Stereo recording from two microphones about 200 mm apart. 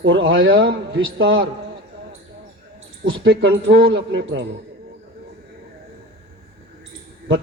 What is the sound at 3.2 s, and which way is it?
A man's voice, 65° right (ahead or behind).